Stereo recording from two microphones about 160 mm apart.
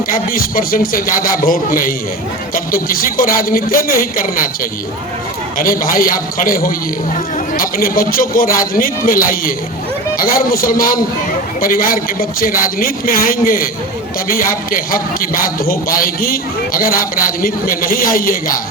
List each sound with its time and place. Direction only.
0.1 s a man's voice: 65° left (ahead or behind)
5.5 s a man's voice: 60° left (ahead or behind)